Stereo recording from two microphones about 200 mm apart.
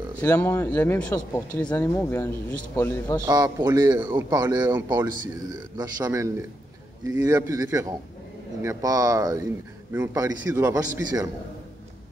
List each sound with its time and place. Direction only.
0.2 s speech: 10° left (ahead or behind)
3.2 s a man's voice: 20° right (ahead or behind)